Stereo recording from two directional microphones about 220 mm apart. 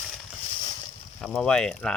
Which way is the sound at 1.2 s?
5° left (ahead or behind).